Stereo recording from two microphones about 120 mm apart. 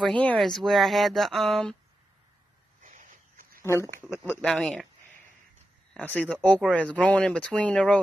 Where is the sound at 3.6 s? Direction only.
20° left (ahead or behind).